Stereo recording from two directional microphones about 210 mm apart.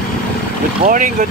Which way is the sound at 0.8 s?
40° right (ahead or behind).